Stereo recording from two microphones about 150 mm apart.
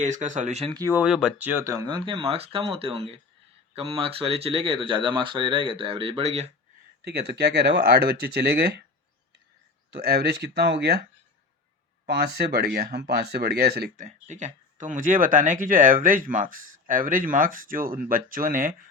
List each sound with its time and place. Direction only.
0.0 s speech: 55° right (ahead or behind)
0.7 s speech: 25° right (ahead or behind)
0.9 s speech: 5° right (ahead or behind); by 6.5 s 45° right (ahead or behind)
7.0 s speech: 90° right
9.9 s speech: 90° right
12.2 s speech: 90° right; by 18.9 s 65° right (ahead or behind)